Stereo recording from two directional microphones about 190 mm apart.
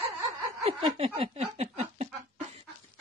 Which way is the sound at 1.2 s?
30° right (ahead or behind).